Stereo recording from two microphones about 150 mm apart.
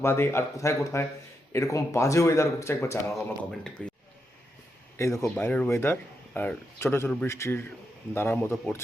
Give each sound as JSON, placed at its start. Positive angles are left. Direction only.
{"t": 0.0, "sound": "speech", "side_deg": 15}
{"t": 3.8, "sound": "speech", "side_deg": 5}
{"t": 4.9, "sound": "speech", "side_deg": 20}